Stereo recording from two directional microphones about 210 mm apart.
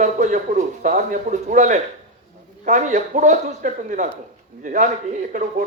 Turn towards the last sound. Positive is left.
turn(degrees=-35)  # may be behind; listen again after turning